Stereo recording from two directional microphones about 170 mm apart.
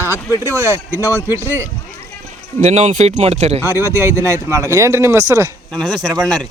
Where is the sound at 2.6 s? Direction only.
40° right (ahead or behind).